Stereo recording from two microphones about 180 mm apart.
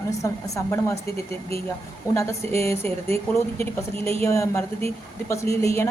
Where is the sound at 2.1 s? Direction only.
15° left (ahead or behind).